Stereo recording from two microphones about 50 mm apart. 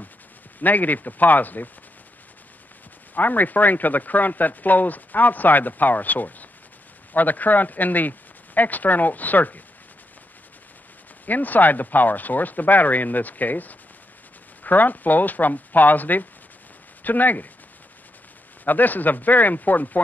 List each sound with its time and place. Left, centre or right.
0.6 s speech: left
3.2 s speech: left
11.2 s speech: left
18.6 s speech: left